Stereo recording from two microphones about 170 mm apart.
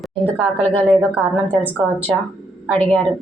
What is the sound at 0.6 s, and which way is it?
Speech, 35° right (ahead or behind).